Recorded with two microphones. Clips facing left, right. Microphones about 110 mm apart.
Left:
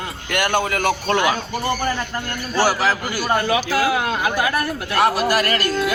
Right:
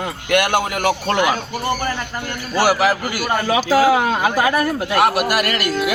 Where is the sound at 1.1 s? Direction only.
15° right (ahead or behind).